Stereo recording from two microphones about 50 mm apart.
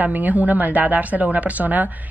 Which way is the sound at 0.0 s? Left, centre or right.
Right.